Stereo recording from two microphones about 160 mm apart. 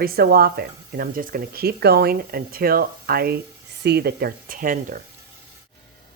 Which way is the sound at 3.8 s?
85° right.